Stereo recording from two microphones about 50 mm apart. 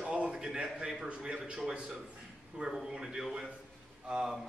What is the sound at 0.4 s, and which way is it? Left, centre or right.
Speech, centre.